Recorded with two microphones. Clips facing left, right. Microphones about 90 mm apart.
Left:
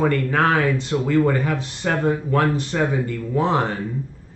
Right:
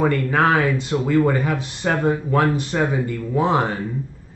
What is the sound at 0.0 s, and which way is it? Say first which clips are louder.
Speech: right 1 dB; 10° right (ahead or behind).